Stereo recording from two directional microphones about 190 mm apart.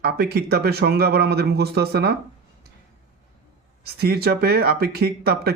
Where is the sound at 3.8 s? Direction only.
55° right (ahead or behind).